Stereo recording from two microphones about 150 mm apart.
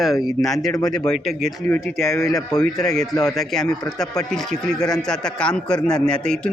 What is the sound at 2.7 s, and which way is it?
A man's voice, centre (ahead or behind).